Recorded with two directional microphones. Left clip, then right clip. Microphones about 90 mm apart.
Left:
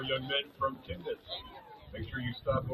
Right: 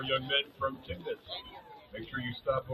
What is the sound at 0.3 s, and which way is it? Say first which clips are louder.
A man's voice: right 1 dB; 35° left (ahead or behind).